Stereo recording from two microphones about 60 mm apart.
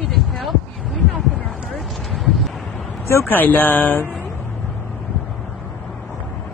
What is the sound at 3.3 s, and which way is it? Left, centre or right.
Speech, left.